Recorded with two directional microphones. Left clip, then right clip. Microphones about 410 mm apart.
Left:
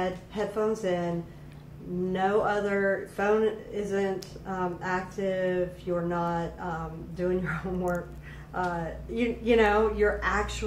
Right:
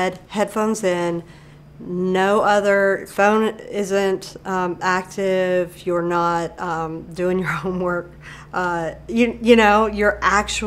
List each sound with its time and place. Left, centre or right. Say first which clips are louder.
0.0 s speech: right 9 dB; right
2.1 s speech: right 10 dB; right